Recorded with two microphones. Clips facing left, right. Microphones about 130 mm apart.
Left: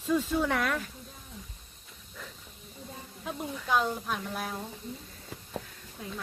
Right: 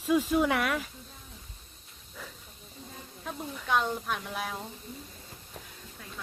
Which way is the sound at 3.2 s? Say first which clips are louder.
Left 2 dB; 5° left (ahead or behind).